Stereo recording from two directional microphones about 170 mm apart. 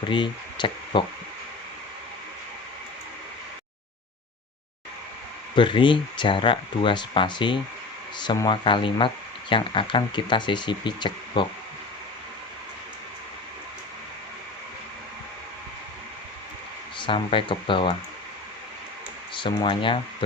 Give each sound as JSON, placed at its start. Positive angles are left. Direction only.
{"t": 0.1, "sound": "speech", "side_deg": 25}
{"t": 5.5, "sound": "speech", "side_deg": 30}
{"t": 17.0, "sound": "speech", "side_deg": 30}
{"t": 19.3, "sound": "speech", "side_deg": 30}